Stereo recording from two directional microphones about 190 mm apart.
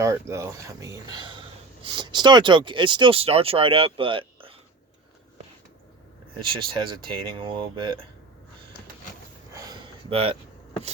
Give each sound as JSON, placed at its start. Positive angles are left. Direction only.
{"t": 0.0, "sound": "speech", "side_deg": -15}
{"t": 6.7, "sound": "speech", "side_deg": -25}
{"t": 9.5, "sound": "a sound", "side_deg": -20}